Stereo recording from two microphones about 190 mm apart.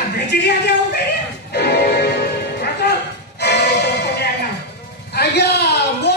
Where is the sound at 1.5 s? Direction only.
60° left (ahead or behind).